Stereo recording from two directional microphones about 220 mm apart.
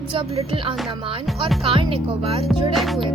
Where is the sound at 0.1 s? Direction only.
25° right (ahead or behind).